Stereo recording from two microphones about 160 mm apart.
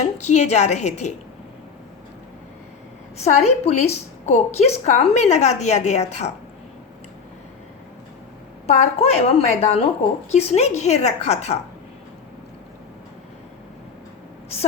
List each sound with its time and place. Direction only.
0.0 s a woman's voice: 45° left (ahead or behind)
3.2 s a woman's voice: 45° left (ahead or behind)
8.6 s a woman's voice: 40° left (ahead or behind)